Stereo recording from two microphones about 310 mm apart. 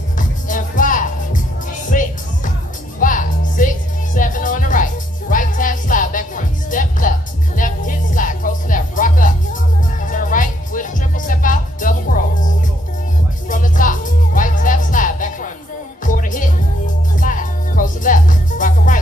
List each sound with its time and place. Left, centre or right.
0.2 s music: left